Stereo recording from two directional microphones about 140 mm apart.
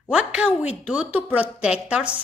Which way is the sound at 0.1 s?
10° right (ahead or behind).